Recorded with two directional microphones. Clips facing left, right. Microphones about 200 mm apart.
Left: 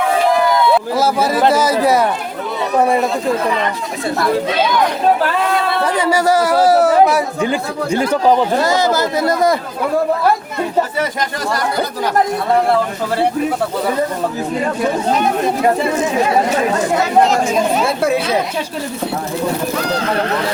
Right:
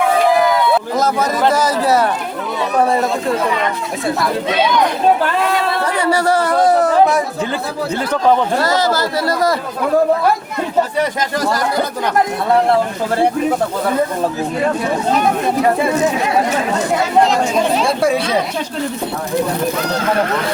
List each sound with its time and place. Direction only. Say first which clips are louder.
0.9 s speech: left 1 dB; 10° left (ahead or behind)
6.0 s speech: left 1 dB; 10° left (ahead or behind)
8.9 s speech: left 2 dB; 20° left (ahead or behind)
17.2 s speech: even; 5° left (ahead or behind)